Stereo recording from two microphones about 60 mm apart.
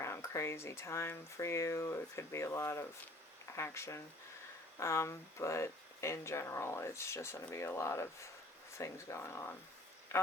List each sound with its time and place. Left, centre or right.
0.0 s speech: left
1.4 s speech: left